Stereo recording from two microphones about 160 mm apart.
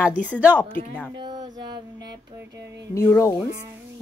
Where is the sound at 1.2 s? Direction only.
25° right (ahead or behind).